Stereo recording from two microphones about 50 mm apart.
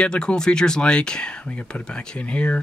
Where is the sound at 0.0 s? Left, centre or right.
Centre.